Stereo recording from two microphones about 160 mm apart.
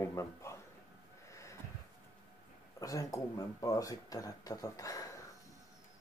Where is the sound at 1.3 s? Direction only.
20° left (ahead or behind).